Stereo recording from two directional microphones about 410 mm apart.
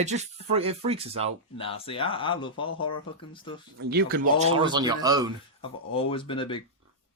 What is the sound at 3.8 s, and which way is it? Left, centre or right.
Speech, right.